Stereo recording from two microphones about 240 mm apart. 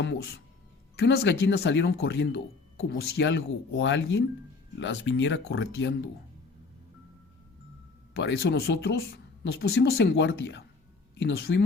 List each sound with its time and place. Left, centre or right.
0.0 s speech: left
8.1 s speech: left